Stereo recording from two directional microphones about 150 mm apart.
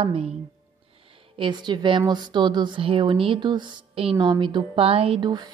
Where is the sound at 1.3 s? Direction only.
30° right (ahead or behind).